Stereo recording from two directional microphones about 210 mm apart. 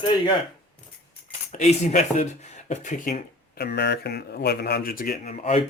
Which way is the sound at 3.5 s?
50° left (ahead or behind).